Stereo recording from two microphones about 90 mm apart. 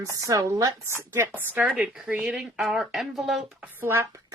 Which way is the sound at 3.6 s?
25° right (ahead or behind).